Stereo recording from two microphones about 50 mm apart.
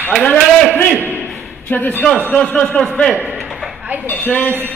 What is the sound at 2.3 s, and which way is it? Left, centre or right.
Speech, left.